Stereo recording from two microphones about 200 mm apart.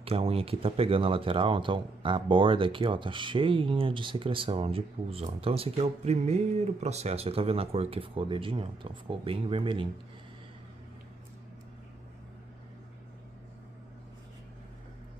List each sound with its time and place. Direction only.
0.0 s speech: 30° right (ahead or behind)